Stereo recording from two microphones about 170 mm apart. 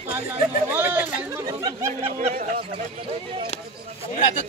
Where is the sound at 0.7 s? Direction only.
10° right (ahead or behind).